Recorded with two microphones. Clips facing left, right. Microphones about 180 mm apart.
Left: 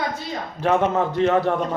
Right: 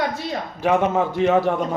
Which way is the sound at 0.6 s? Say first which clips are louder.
Right 1 dB; 10° right (ahead or behind).